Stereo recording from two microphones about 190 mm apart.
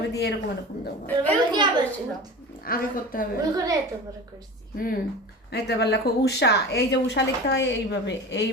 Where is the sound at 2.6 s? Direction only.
50° left (ahead or behind).